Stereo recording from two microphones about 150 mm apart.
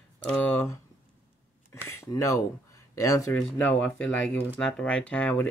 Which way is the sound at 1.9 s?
20° left (ahead or behind).